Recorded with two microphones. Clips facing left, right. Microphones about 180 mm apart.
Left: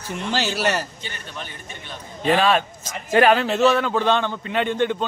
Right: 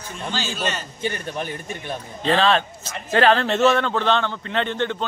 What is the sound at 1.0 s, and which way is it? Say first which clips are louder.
Speech: right 9 dB; 45° right (ahead or behind).